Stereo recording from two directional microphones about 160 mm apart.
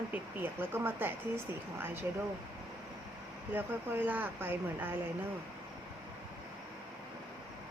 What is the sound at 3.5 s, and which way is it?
Speech, 10° right (ahead or behind).